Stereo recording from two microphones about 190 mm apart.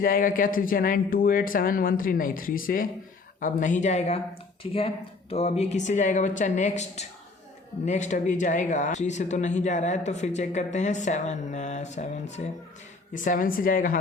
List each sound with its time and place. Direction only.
0.0 s speech: 45° left (ahead or behind)